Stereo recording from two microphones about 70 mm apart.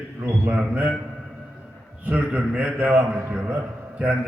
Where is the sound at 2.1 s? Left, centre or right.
Centre.